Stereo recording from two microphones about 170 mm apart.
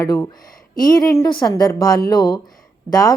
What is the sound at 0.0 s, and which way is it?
Speech, 20° left (ahead or behind).